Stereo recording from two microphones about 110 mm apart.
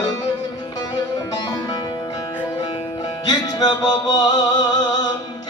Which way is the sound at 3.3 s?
35° left (ahead or behind).